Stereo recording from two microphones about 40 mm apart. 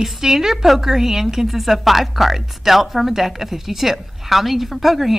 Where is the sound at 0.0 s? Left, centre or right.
Centre.